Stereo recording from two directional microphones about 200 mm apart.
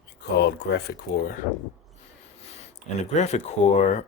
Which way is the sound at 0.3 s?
55° left (ahead or behind).